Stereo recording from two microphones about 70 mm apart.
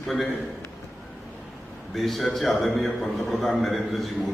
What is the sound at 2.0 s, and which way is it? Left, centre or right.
A man's voice, centre.